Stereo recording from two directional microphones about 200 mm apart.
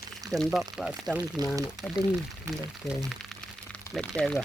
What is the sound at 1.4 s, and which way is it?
Speech, 20° right (ahead or behind).